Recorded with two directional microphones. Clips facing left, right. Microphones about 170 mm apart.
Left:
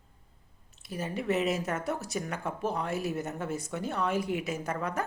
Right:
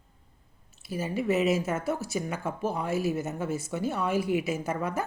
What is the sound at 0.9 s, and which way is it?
Speech, 5° right (ahead or behind).